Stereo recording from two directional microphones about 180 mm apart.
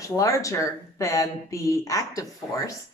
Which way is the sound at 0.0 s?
20° left (ahead or behind).